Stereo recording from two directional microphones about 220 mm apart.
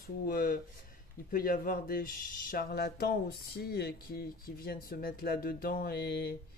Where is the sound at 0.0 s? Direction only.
40° left (ahead or behind).